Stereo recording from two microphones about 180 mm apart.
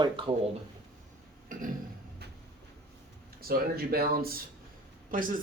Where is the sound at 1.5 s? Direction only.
50° right (ahead or behind).